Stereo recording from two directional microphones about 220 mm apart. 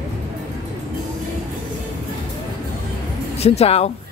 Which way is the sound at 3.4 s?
30° left (ahead or behind).